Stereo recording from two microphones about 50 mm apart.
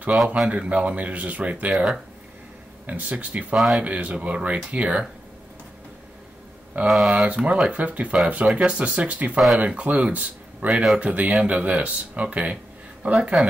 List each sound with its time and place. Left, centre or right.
0.5 s speech: right
1.7 s speech: centre
2.9 s speech: right
3.5 s speech: centre
3.8 s speech: right
6.9 s speech: centre
7.2 s speech: right
10.7 s speech: centre
11.0 s speech: right